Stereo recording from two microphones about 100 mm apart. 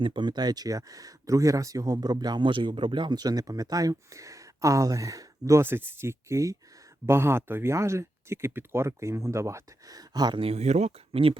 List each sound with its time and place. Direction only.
0.0 s speech: 50° right (ahead or behind); by 10.0 s 30° right (ahead or behind)
10.2 s speech: 45° right (ahead or behind)
10.4 s speech: 90° right; by 11.3 s 70° right (ahead or behind)